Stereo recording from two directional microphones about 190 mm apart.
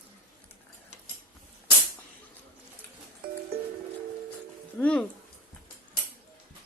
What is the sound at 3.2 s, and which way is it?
Music, 55° right (ahead or behind).